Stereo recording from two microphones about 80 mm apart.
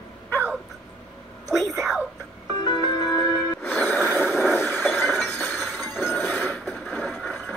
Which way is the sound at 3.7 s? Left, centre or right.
Centre.